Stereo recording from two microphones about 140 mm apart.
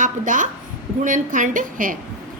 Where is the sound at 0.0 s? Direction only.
70° right (ahead or behind).